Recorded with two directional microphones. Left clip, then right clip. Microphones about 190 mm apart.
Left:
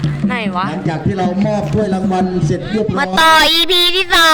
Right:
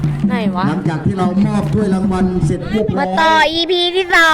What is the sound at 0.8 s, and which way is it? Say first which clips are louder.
A man's voice: left 1 dB; 65° right (ahead or behind).